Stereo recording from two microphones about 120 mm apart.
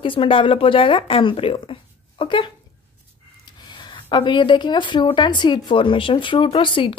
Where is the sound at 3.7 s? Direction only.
40° left (ahead or behind).